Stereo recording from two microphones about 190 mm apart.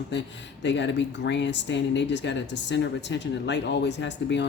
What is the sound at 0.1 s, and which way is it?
Speech, 70° left (ahead or behind).